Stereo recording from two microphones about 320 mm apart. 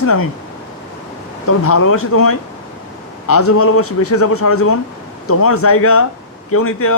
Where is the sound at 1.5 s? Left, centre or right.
Left.